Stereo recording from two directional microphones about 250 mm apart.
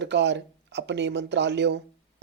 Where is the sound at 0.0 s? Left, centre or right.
Right.